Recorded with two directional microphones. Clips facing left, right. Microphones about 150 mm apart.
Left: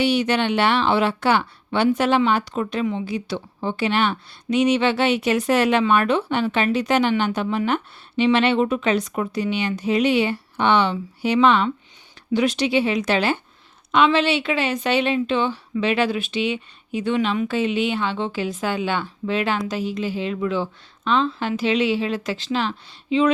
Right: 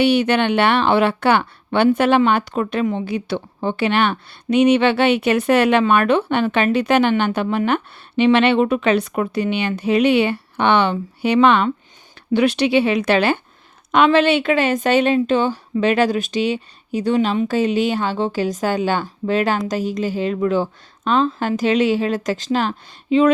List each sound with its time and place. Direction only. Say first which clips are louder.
0.0 s a woman's voice: right 4 dB; 55° right (ahead or behind)